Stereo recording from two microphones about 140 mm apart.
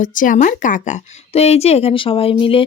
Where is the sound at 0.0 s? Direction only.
70° left (ahead or behind).